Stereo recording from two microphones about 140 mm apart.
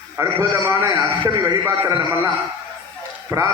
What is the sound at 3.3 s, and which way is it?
Speech, 20° right (ahead or behind).